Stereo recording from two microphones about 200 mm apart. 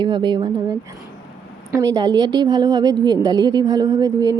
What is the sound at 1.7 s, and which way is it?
Speech, 20° right (ahead or behind).